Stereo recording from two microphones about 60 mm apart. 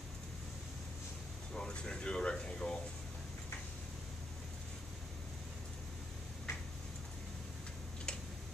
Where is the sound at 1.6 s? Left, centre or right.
Centre.